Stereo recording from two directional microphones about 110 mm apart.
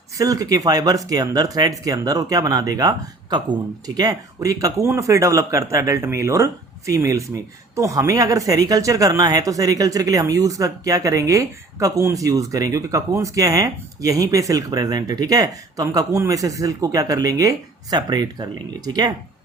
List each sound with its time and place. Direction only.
0.2 s speech: 30° right (ahead or behind)